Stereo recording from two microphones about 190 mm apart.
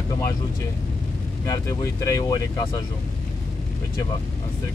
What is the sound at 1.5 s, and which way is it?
Speech, 15° left (ahead or behind).